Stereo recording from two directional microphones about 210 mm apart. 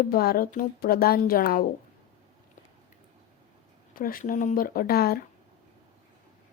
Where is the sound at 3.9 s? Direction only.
40° left (ahead or behind).